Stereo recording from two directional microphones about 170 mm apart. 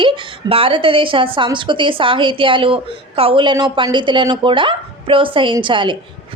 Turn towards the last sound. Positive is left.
turn(degrees=-30)  # may be behind; listen again after turning